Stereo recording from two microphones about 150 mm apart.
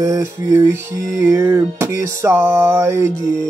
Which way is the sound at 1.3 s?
20° right (ahead or behind).